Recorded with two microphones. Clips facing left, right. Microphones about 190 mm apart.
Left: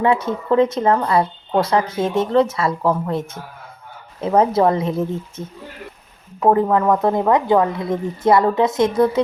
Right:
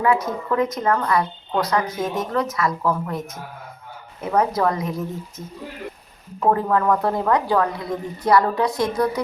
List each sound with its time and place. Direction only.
0.0 s speech: 25° left (ahead or behind)
6.5 s speech: 20° left (ahead or behind)